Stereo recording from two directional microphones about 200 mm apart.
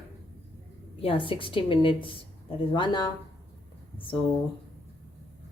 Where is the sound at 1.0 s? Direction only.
25° left (ahead or behind).